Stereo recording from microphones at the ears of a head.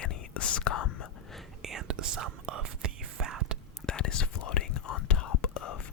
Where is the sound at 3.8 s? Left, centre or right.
Left.